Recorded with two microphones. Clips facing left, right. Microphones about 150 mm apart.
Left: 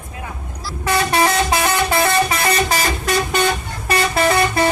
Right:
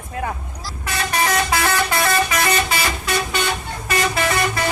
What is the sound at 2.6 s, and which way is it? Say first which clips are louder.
Vehicle: left 3 dB; 45° left (ahead or behind).